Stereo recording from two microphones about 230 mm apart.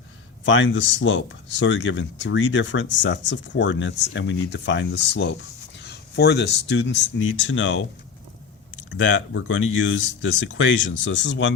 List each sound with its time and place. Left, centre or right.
0.4 s speech: left
8.9 s speech: left